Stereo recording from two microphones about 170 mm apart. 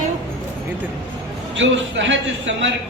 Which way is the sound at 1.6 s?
90° right.